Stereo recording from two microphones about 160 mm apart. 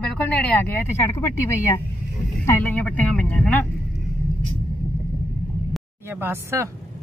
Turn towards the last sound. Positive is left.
turn(degrees=-15)  # may be behind; listen again after turning